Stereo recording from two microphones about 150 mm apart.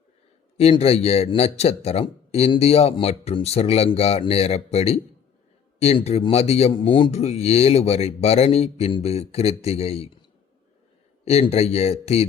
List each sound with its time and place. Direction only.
0.5 s speech: 40° left (ahead or behind)
11.3 s speech: 45° left (ahead or behind)